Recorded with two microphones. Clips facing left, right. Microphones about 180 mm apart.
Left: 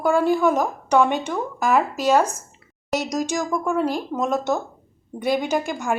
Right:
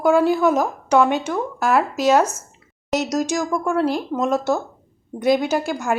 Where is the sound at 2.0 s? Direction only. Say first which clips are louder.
Right 2 dB; 10° left (ahead or behind).